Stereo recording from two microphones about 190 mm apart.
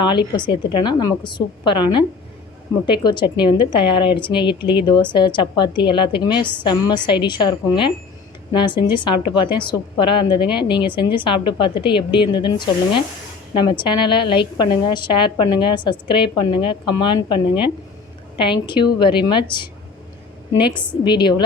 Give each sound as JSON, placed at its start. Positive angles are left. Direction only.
{"t": 0.0, "sound": "a woman's voice", "side_deg": 25}
{"t": 21.0, "sound": "a woman's voice", "side_deg": 25}